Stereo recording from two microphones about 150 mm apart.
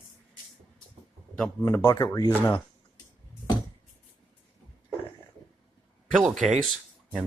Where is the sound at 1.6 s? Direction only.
20° left (ahead or behind).